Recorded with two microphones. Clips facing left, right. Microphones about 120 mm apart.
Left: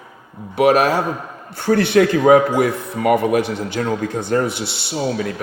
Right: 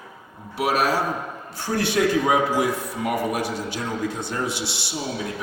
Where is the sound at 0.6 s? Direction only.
55° left (ahead or behind).